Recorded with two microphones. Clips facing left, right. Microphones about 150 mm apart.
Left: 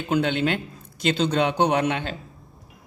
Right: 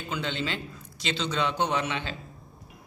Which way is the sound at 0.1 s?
55° left (ahead or behind).